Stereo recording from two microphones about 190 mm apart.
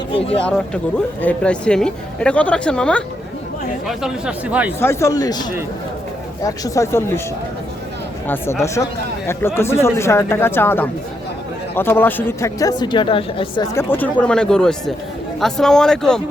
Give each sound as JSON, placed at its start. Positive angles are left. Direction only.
{"t": 0.3, "sound": "speech", "side_deg": 5}
{"t": 4.8, "sound": "speech", "side_deg": 15}
{"t": 8.6, "sound": "a woman's voice", "side_deg": 15}
{"t": 13.7, "sound": "speech", "side_deg": 10}